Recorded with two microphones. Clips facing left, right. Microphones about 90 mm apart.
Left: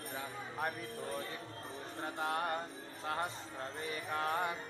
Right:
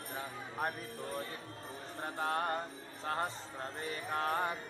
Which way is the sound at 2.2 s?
35° right (ahead or behind).